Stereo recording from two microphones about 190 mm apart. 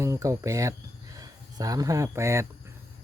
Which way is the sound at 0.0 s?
15° right (ahead or behind).